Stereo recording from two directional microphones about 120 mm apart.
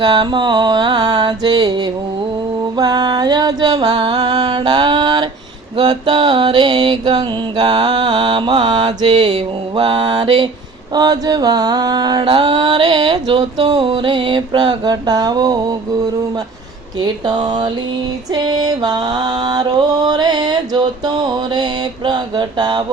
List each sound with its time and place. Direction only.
0.0 s mantra: 40° right (ahead or behind)
2.7 s mantra: 35° right (ahead or behind)
17.0 s mantra: 35° right (ahead or behind)